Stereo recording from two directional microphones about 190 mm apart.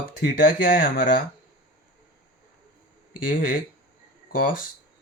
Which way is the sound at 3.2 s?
45° left (ahead or behind).